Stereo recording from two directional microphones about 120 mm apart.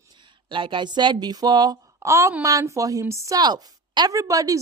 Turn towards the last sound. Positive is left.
turn(degrees=-30)  # may be behind; listen again after turning